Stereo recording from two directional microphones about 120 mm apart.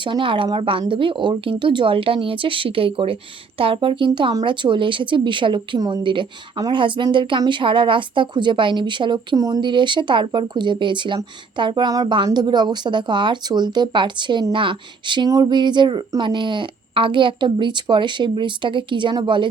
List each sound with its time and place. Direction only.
0.0 s speech: 45° right (ahead or behind)